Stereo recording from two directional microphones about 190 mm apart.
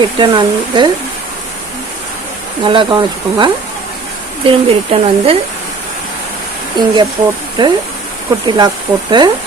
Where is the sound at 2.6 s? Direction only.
25° right (ahead or behind).